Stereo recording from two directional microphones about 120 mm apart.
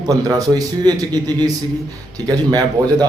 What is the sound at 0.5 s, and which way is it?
Speech, 35° right (ahead or behind).